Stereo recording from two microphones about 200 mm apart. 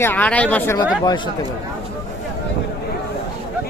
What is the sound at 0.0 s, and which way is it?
Speech, 10° left (ahead or behind).